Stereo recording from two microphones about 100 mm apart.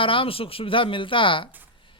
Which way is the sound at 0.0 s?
60° left (ahead or behind).